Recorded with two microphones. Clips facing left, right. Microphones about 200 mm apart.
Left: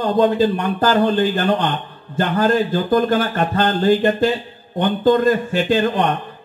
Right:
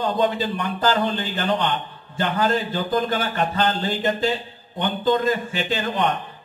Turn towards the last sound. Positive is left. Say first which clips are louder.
# left 8 dB
turn(degrees=50)  # may be behind; listen again after turning